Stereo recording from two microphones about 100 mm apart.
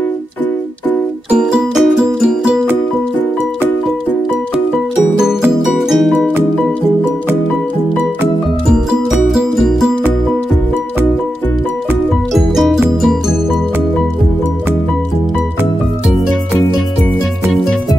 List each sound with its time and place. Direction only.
1.3 s music: 5° right (ahead or behind)
5.8 s music: centre (ahead or behind)
9.3 s music: 5° right (ahead or behind)
12.4 s music: 5° right (ahead or behind)